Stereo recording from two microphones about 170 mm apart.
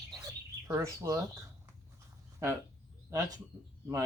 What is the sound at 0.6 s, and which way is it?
Speech, 20° right (ahead or behind).